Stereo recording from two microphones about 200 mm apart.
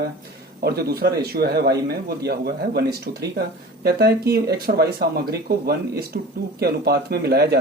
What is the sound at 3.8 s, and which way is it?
Speech, 50° right (ahead or behind).